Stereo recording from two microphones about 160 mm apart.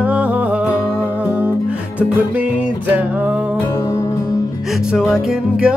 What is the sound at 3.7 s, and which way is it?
Music, 20° left (ahead or behind).